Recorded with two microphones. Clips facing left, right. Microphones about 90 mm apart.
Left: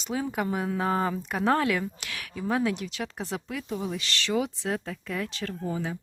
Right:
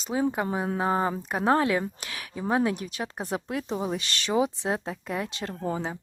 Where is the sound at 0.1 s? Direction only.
25° right (ahead or behind).